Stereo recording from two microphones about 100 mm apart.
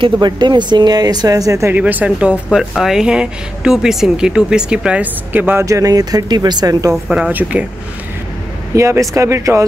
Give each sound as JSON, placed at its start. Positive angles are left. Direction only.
{"t": 0.0, "sound": "speech", "side_deg": -50}
{"t": 1.7, "sound": "speech", "side_deg": -15}
{"t": 5.7, "sound": "speech", "side_deg": -35}
{"t": 7.1, "sound": "speech", "side_deg": -10}
{"t": 8.7, "sound": "speech", "side_deg": -30}